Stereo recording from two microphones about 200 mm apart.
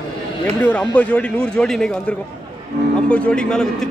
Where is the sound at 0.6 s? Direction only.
5° left (ahead or behind).